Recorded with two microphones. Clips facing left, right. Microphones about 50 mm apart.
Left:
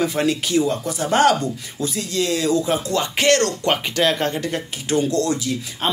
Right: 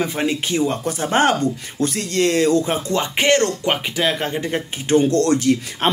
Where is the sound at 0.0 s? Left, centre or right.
Right.